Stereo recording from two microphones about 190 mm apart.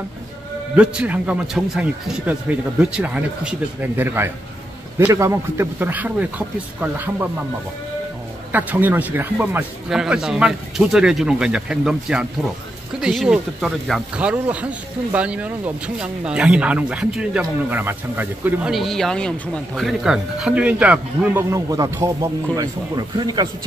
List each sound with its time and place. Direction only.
0.7 s a man's voice: 5° right (ahead or behind)
8.5 s speech: 10° right (ahead or behind)